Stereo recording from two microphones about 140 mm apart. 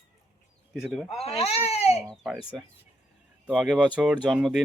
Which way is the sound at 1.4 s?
45° left (ahead or behind).